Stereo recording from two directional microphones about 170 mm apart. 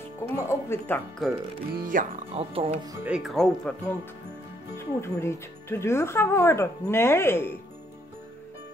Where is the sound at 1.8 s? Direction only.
50° right (ahead or behind).